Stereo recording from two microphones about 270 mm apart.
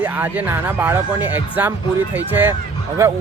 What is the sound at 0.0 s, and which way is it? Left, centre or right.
Speech, centre.